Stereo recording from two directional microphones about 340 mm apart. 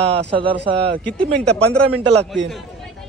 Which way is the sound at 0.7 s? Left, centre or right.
Right.